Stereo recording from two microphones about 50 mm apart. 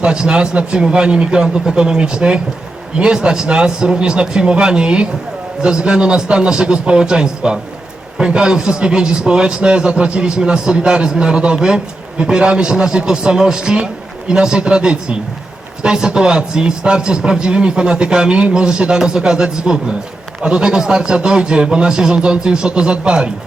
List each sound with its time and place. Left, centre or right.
0.0 s a man's voice: centre